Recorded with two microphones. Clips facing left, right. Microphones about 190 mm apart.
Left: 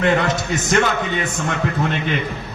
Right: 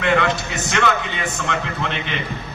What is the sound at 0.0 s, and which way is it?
Speech, 40° left (ahead or behind).